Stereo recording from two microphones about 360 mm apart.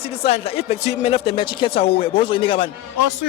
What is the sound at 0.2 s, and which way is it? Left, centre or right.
Speech, centre.